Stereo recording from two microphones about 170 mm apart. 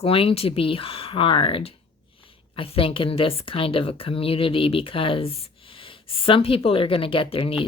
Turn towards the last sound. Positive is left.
turn(degrees=30)  # may be behind; listen again after turning